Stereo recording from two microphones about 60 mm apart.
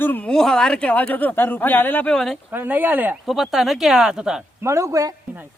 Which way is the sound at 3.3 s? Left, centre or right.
Centre.